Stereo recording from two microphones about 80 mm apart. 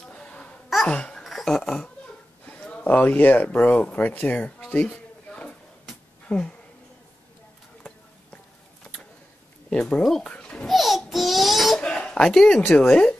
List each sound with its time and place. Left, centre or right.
0.1 s a sound: centre
0.8 s a child's voice: centre
1.2 s dishes: centre
2.4 s speech: centre
9.7 s speech: centre
10.3 s babbling: centre
10.7 s babbling: centre
11.8 s a sound: centre
12.7 s speech: centre